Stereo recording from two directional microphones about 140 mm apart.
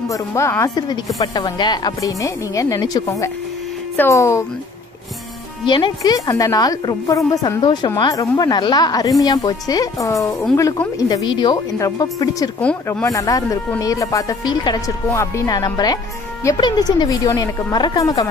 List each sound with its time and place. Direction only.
0.1 s speech: 20° left (ahead or behind)
5.7 s a woman's voice: 35° left (ahead or behind)
12.5 s speech: 10° left (ahead or behind)
13.0 s speech: 25° left (ahead or behind)